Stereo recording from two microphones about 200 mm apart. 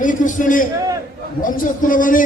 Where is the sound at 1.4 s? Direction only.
40° left (ahead or behind).